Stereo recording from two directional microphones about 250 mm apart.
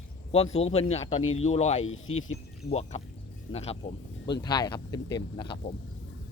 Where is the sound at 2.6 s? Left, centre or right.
Left.